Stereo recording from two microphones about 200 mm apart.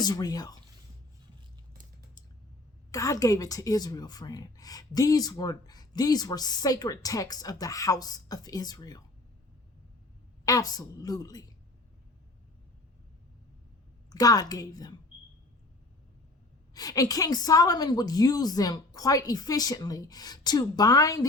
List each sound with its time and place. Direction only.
0.0 s a woman's voice: 20° left (ahead or behind)
2.9 s a woman's voice: 15° left (ahead or behind)
10.4 s a woman's voice: 20° left (ahead or behind)
14.1 s a woman's voice: 20° left (ahead or behind)
16.7 s a woman's voice: 20° left (ahead or behind)